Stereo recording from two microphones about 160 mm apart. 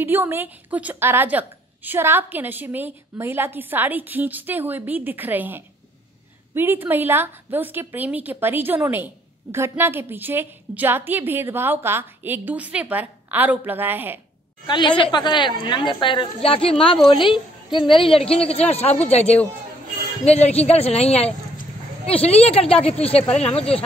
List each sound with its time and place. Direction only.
0.0 s a woman's voice: 15° right (ahead or behind)
14.7 s a woman's voice: 30° left (ahead or behind)